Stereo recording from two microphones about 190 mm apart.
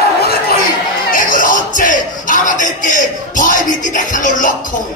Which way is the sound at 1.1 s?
45° left (ahead or behind).